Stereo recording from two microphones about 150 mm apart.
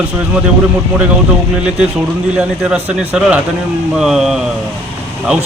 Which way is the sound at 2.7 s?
10° right (ahead or behind).